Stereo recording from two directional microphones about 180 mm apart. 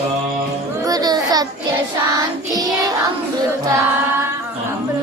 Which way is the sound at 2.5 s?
20° right (ahead or behind).